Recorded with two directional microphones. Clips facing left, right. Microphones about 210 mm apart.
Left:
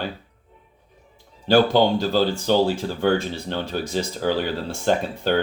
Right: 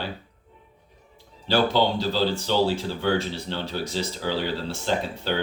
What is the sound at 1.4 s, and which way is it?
Speech, 50° left (ahead or behind).